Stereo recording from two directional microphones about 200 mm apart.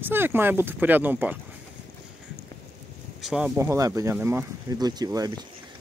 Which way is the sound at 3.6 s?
15° right (ahead or behind).